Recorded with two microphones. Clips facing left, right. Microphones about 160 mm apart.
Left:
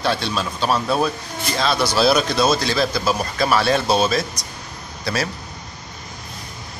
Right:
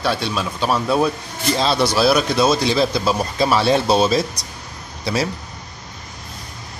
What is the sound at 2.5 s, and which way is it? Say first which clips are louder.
Speech: right 2 dB; 20° right (ahead or behind).